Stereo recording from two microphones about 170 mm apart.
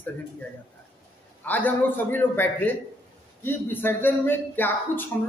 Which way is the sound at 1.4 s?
10° left (ahead or behind).